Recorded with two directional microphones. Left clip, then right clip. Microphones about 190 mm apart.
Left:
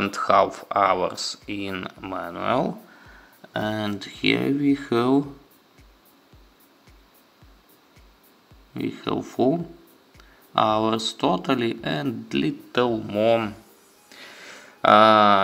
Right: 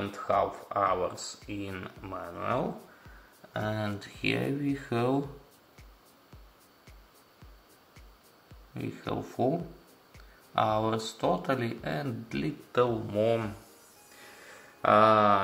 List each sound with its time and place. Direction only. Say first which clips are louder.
0.0 s speech: left 9 dB; 30° left (ahead or behind)
8.7 s speech: left 8 dB; 15° left (ahead or behind)
10.5 s speech: left 7 dB; 15° left (ahead or behind)
14.2 s a sound: left 8 dB; 20° left (ahead or behind)